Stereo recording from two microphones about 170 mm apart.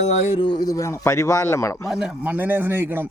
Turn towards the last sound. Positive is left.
turn(degrees=-10)  # may be behind; listen again after turning